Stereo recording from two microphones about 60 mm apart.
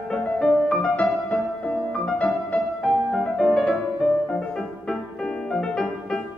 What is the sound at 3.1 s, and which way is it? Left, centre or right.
Music, centre.